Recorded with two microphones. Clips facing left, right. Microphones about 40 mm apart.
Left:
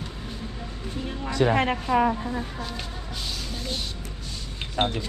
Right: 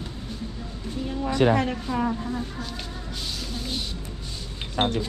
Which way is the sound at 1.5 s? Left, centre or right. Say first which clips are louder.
Left 3 dB; left.